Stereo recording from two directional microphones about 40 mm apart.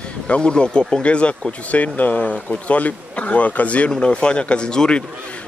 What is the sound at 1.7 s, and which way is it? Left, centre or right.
Speech, left.